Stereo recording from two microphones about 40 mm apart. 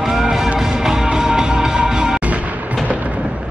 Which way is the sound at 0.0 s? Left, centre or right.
Centre.